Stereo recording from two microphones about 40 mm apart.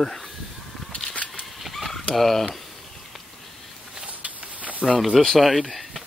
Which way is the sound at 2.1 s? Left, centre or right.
Centre.